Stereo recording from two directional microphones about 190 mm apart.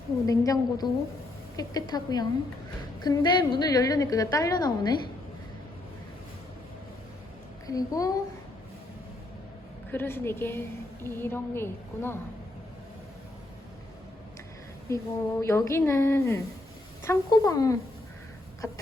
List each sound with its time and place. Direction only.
0.3 s a woman's voice: 20° left (ahead or behind)
7.7 s a woman's voice: 20° left (ahead or behind)
9.9 s a woman's voice: 10° left (ahead or behind)
14.8 s a woman's voice: 15° left (ahead or behind)